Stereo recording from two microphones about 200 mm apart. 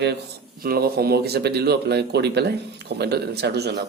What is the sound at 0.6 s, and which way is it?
Speech, 50° right (ahead or behind).